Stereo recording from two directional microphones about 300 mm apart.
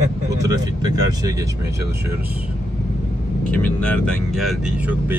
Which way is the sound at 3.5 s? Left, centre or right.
Centre.